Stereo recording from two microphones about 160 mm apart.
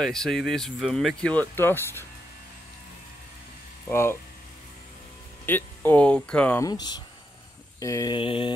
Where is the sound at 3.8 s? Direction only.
15° left (ahead or behind).